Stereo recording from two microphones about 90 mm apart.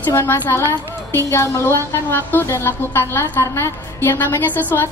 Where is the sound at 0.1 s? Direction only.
25° left (ahead or behind).